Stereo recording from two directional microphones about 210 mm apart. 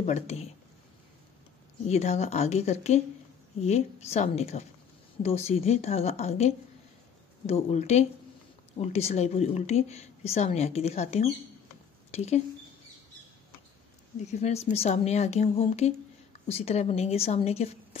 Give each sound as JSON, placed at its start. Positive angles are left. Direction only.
{"t": 0.0, "sound": "a woman's voice", "side_deg": 30}
{"t": 1.9, "sound": "a woman's voice", "side_deg": 30}
{"t": 7.7, "sound": "a woman's voice", "side_deg": 30}
{"t": 14.2, "sound": "a woman's voice", "side_deg": 30}